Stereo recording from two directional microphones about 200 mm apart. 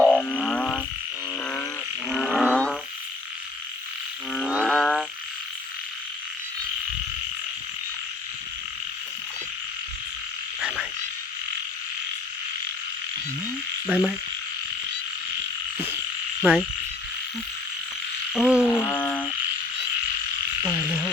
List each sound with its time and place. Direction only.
0.0 s frog: 5° left (ahead or behind)
2.0 s roaring cats: centre (ahead or behind)
4.3 s frog: centre (ahead or behind)
10.6 s frog: 5° right (ahead or behind)
13.8 s frog: centre (ahead or behind)
16.4 s frog: centre (ahead or behind)
18.3 s frog: 5° right (ahead or behind)
18.6 s a sound: 15° left (ahead or behind)
20.7 s frog: 5° left (ahead or behind)